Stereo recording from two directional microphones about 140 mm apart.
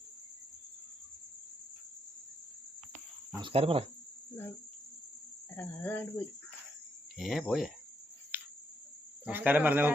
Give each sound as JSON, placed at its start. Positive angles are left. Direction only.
{"t": 3.4, "sound": "cricket", "side_deg": -45}
{"t": 5.5, "sound": "speech", "side_deg": 15}
{"t": 7.2, "sound": "speech", "side_deg": 0}
{"t": 8.3, "sound": "cricket", "side_deg": -10}
{"t": 9.2, "sound": "speech", "side_deg": -10}